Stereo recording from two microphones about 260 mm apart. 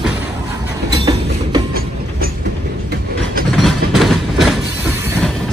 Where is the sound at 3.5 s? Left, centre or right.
Centre.